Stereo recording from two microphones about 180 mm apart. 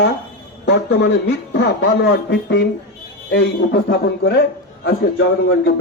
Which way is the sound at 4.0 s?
65° left (ahead or behind).